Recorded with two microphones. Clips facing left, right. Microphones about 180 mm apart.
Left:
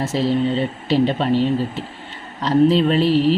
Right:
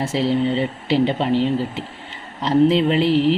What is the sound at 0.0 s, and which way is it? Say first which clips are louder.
Speech: even; 15° right (ahead or behind).